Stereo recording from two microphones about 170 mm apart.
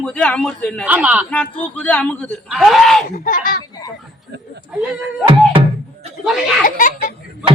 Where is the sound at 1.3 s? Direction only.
10° left (ahead or behind).